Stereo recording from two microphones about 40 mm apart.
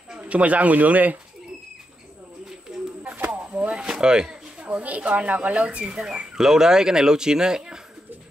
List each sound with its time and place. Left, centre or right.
0.3 s speech: right
2.7 s bird: right
3.5 s a sound: right
3.8 s speech: centre
6.3 s speech: centre